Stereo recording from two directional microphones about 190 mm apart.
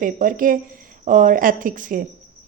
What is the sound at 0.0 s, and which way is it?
A woman's voice, 45° right (ahead or behind).